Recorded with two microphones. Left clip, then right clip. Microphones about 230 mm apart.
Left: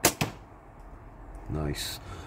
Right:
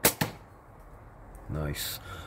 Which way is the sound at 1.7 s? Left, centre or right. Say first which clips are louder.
Left 1 dB; right.